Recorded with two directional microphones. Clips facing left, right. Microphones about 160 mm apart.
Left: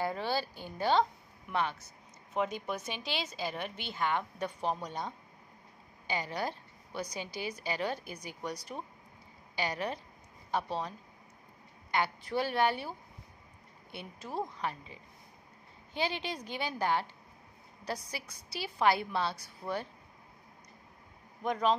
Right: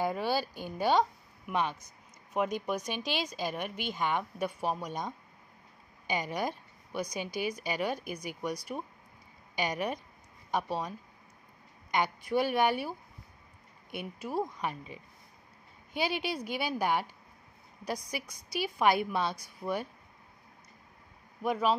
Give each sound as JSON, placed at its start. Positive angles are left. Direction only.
{"t": 0.0, "sound": "a woman's voice", "side_deg": -10}
{"t": 13.9, "sound": "a woman's voice", "side_deg": -10}
{"t": 21.4, "sound": "a woman's voice", "side_deg": -10}